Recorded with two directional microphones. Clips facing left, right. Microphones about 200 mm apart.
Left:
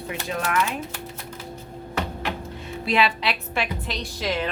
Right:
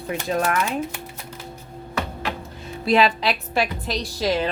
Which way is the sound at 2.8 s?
40° right (ahead or behind).